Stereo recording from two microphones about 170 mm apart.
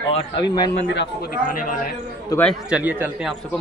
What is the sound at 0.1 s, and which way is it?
Speech, 25° left (ahead or behind).